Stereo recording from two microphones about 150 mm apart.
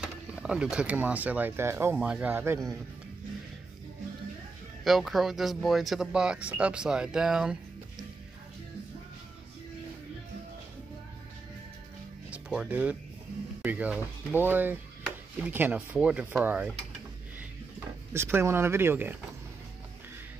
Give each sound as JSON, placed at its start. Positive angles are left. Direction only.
{"t": 0.0, "sound": "speech", "side_deg": -5}
{"t": 4.8, "sound": "speech", "side_deg": 0}
{"t": 12.3, "sound": "speech", "side_deg": -5}
{"t": 17.7, "sound": "speech", "side_deg": -15}